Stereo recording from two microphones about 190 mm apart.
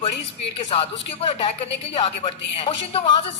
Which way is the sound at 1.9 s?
30° left (ahead or behind).